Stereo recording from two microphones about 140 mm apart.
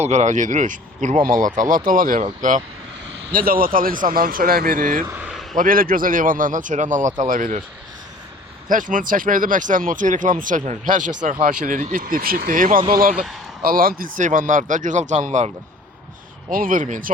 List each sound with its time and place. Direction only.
0.0 s speech: 55° right (ahead or behind)
3.3 s speech: 90° right
5.0 s a sound: 10° right (ahead or behind)
5.5 s speech: 90° right
8.7 s speech: 70° right (ahead or behind)
16.5 s speech: 85° right